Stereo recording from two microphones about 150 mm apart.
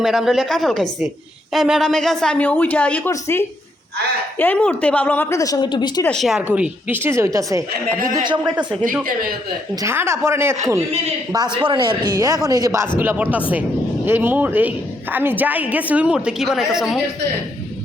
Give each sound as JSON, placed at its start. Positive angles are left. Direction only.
{"t": 0.0, "sound": "a woman's voice", "side_deg": 0}
{"t": 6.1, "sound": "a woman's voice", "side_deg": 0}
{"t": 7.7, "sound": "speech", "side_deg": -70}
{"t": 8.1, "sound": "speech", "side_deg": -30}
{"t": 8.4, "sound": "a woman's voice", "side_deg": -5}
{"t": 9.8, "sound": "a woman's voice", "side_deg": -15}
{"t": 11.5, "sound": "a woman's voice", "side_deg": -35}